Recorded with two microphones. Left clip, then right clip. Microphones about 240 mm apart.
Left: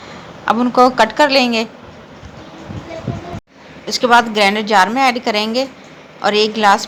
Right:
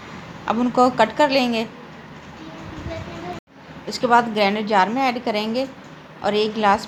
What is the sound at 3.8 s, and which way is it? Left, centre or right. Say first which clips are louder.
A woman's voice: left 5 dB; centre.